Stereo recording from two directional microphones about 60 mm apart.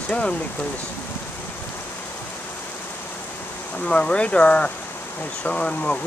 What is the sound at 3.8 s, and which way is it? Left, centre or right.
Speech, centre.